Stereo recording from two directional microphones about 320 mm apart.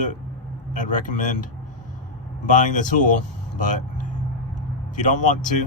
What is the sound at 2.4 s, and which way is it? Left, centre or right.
Speech, left.